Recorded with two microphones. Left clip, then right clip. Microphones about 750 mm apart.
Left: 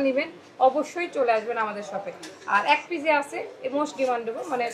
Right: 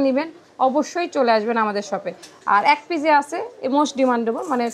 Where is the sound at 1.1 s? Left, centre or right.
Right.